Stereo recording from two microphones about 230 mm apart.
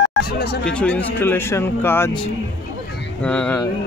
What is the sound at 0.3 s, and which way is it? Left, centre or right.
Speech, left.